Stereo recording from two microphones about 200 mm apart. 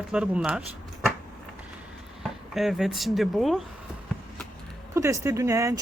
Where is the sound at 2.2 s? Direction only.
Centre (ahead or behind).